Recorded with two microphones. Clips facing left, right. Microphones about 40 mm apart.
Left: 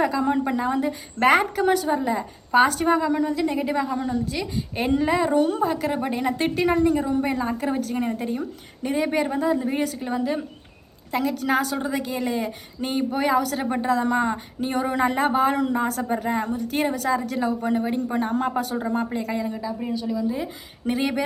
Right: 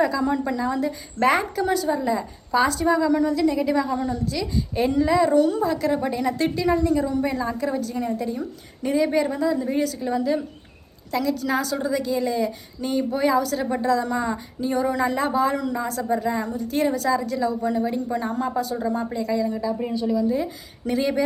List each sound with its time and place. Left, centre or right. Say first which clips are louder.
0.0 s speech: even; left
1.3 s speech: left 4 dB; left
3.1 s speech: right 3 dB; left
6.5 s a woman's voice: left 4 dB; left
7.0 s speech: even; left
8.8 s speech: right 2 dB; left
14.6 s speech: right 1 dB; left
18.8 s speech: even; left
19.8 s speech: right 1 dB; centre
20.1 s speech: right 5 dB; centre
20.8 s speech: right 2 dB; left